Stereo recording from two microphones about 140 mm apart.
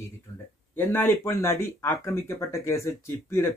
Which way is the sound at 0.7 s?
15° left (ahead or behind).